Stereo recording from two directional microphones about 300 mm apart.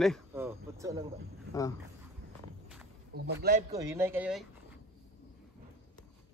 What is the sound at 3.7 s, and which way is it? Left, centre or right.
Speech, centre.